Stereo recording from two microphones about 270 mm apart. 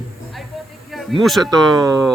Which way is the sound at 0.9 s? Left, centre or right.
Centre.